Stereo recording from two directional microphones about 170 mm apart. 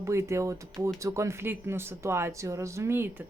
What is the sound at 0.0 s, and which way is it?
Speech, 15° right (ahead or behind).